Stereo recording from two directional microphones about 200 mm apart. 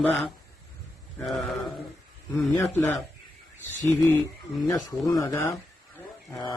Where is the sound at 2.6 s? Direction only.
10° left (ahead or behind).